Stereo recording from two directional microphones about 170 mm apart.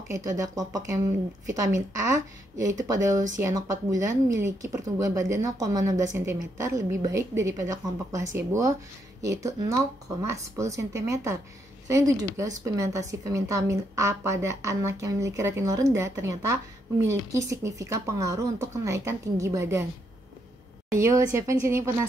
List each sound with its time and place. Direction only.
0.1 s speech: 20° right (ahead or behind)
20.9 s speech: 15° right (ahead or behind)